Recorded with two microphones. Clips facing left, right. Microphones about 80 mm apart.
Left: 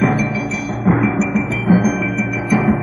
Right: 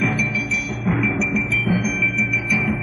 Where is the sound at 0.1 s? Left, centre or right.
Left.